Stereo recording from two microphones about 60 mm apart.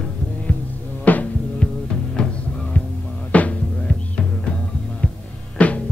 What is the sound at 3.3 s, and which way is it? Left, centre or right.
Music, left.